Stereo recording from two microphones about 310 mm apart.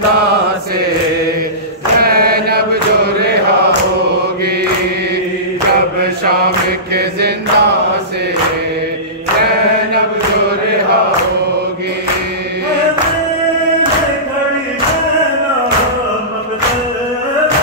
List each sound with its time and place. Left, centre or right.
2.0 s mantra: right
7.0 s mantra: right